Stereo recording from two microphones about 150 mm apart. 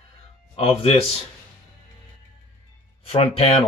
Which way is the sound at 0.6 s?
40° left (ahead or behind).